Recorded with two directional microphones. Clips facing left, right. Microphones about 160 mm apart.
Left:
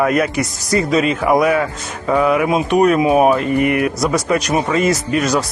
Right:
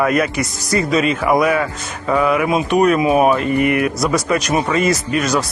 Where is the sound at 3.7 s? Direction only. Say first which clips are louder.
Even; 25° left (ahead or behind).